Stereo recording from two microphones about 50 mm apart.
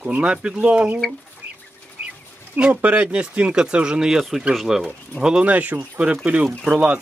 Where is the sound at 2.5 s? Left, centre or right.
Right; by 4.9 s centre.